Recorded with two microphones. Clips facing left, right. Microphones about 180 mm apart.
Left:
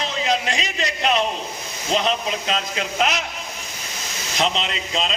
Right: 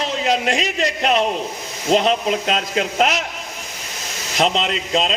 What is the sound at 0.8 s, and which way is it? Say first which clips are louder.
A man's voice: right 1 dB; 40° right (ahead or behind).